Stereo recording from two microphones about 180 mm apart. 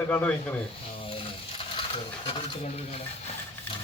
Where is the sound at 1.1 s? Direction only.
30° left (ahead or behind).